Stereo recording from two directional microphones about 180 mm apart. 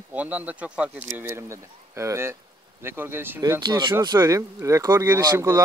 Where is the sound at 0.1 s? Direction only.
10° right (ahead or behind).